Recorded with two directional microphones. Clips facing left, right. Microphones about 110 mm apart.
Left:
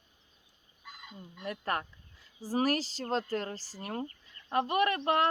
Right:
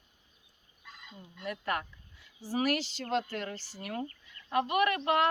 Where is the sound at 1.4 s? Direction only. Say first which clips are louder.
Even; 35° left (ahead or behind).